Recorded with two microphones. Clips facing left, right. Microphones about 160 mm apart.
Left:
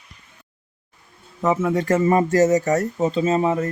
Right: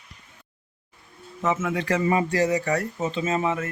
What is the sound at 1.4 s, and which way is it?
Speech, 35° left (ahead or behind).